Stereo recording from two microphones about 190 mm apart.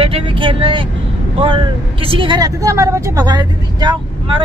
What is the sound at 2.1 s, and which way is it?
Speech, 25° right (ahead or behind).